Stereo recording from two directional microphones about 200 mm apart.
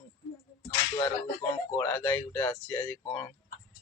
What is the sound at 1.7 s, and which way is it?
Speech, 15° left (ahead or behind).